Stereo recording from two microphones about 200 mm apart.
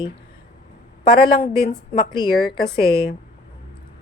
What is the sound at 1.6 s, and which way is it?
A woman's voice, 25° left (ahead or behind).